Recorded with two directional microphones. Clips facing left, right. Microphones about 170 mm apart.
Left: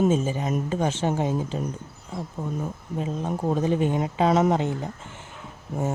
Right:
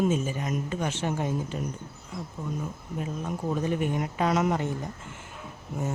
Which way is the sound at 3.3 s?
35° left (ahead or behind).